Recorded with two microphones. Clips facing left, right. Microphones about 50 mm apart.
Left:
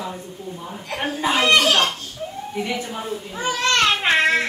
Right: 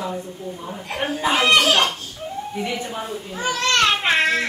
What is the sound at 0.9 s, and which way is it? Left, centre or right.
Speech, centre.